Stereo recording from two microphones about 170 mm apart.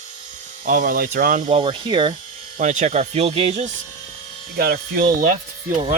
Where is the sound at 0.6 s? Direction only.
55° right (ahead or behind).